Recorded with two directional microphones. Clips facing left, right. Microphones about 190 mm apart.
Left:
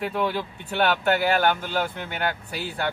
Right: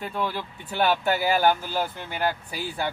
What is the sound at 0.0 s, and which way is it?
A man's voice, centre (ahead or behind).